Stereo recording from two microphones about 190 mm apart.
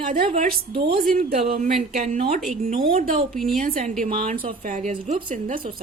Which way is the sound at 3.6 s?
45° right (ahead or behind).